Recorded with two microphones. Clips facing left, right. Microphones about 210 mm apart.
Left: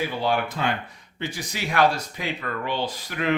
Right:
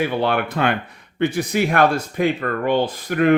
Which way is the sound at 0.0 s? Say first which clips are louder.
Right 5 dB; 60° right (ahead or behind).